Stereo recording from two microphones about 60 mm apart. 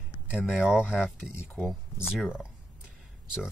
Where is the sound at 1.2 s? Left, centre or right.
Centre.